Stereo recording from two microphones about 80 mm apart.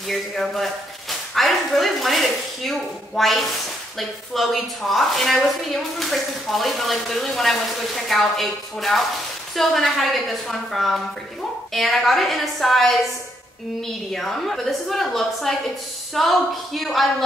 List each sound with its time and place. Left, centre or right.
0.1 s a woman's voice: centre
14.1 s a woman's voice: centre